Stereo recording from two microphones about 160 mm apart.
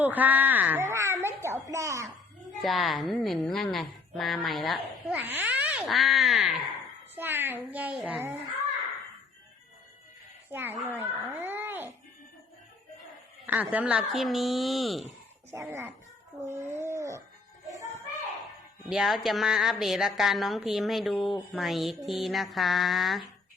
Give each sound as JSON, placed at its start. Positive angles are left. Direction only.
{"t": 0.0, "sound": "a child's voice", "side_deg": -10}
{"t": 2.6, "sound": "a woman's voice", "side_deg": 0}
{"t": 7.2, "sound": "a child's voice", "side_deg": -15}
{"t": 10.5, "sound": "a child's voice", "side_deg": -15}
{"t": 13.4, "sound": "a woman's voice", "side_deg": -10}
{"t": 15.7, "sound": "a child's voice", "side_deg": -15}
{"t": 16.5, "sound": "a sound", "side_deg": -15}
{"t": 18.9, "sound": "a woman's voice", "side_deg": -5}